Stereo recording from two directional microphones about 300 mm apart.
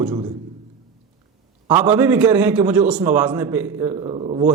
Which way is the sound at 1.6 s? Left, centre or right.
Centre.